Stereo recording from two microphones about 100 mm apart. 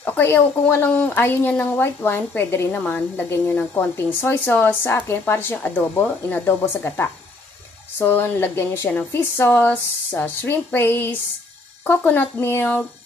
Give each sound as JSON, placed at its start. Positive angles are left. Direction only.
{"t": 0.0, "sound": "speech", "side_deg": 20}